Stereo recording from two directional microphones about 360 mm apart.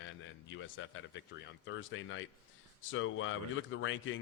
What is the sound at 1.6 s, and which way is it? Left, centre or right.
Speech, left.